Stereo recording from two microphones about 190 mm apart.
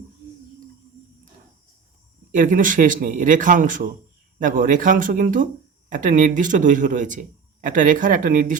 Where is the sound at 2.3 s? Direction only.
45° right (ahead or behind).